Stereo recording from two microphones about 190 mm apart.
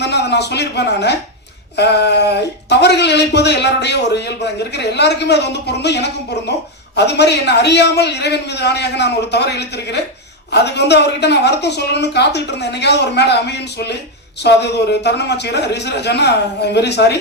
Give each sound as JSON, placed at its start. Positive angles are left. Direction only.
{"t": 0.0, "sound": "speech", "side_deg": 60}